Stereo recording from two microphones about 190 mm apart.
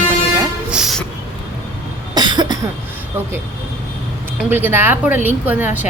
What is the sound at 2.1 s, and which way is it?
Cough, 20° right (ahead or behind).